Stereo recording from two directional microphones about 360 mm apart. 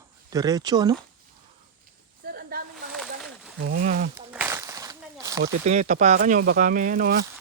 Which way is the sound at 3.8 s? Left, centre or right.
Right.